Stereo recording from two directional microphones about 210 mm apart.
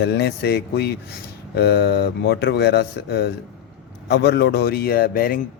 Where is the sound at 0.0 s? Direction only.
50° left (ahead or behind).